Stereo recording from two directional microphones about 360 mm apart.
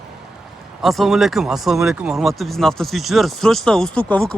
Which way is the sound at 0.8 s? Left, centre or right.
Centre.